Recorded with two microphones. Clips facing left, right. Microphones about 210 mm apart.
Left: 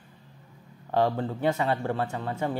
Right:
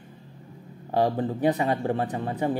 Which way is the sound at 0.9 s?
15° right (ahead or behind).